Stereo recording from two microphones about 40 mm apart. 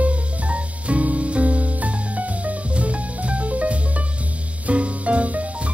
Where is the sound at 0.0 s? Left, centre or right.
Right.